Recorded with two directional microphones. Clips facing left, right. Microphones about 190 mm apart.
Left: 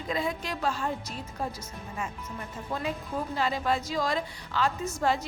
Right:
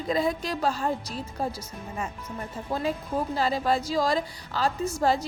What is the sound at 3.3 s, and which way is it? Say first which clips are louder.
A woman's voice: right 2 dB; 35° right (ahead or behind).